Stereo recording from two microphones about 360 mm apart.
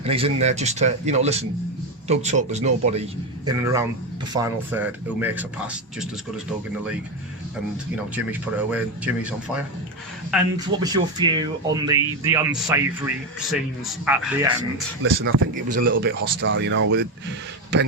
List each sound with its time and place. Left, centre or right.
0.0 s speech: centre
8.1 s speech: centre
10.3 s speech: centre
10.8 s speech: centre
15.1 s a man's voice: right